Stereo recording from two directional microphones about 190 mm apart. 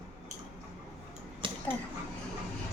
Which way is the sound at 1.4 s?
25° right (ahead or behind).